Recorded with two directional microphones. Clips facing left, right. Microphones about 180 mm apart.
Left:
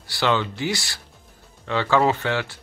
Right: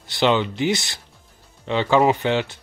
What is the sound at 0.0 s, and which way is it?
Speech, 20° right (ahead or behind).